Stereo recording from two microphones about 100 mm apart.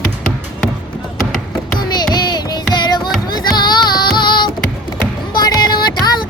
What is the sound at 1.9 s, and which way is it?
Music, 45° left (ahead or behind).